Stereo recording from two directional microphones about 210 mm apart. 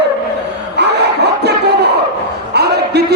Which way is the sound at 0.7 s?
55° right (ahead or behind).